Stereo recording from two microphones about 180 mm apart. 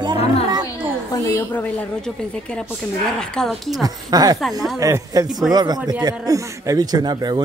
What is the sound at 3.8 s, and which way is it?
Speech, 20° right (ahead or behind).